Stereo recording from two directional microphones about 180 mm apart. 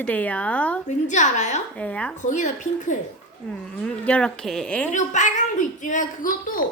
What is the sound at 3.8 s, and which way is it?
Speech, 5° left (ahead or behind).